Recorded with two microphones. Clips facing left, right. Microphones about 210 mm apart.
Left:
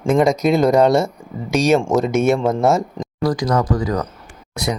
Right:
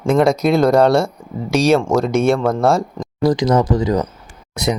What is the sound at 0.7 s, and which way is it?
Speech, 20° left (ahead or behind).